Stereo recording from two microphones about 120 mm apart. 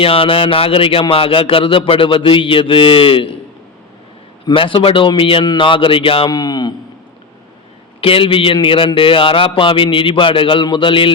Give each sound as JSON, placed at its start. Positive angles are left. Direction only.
{"t": 0.0, "sound": "speech", "side_deg": 50}
{"t": 4.5, "sound": "speech", "side_deg": 50}
{"t": 6.3, "sound": "a man's voice", "side_deg": 35}
{"t": 8.0, "sound": "speech", "side_deg": 50}